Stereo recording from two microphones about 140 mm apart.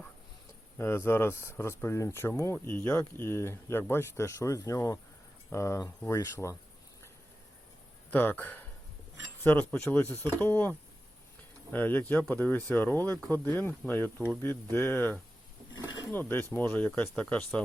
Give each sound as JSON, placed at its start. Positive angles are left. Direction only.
{"t": 0.8, "sound": "speech", "side_deg": 15}
{"t": 8.1, "sound": "speech", "side_deg": 15}